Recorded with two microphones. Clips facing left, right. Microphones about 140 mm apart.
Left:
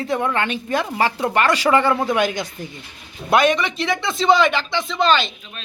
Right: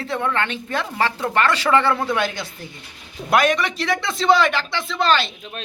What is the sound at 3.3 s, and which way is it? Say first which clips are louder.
Speech: left 1 dB; centre (ahead or behind).